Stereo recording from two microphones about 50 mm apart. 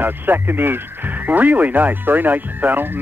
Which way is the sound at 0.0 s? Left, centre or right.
Right.